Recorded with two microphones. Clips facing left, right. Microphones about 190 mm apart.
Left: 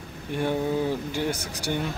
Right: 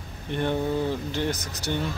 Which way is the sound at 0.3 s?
10° left (ahead or behind).